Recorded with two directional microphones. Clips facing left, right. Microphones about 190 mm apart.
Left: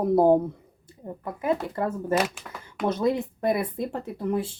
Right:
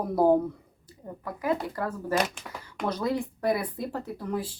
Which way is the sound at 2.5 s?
10° right (ahead or behind).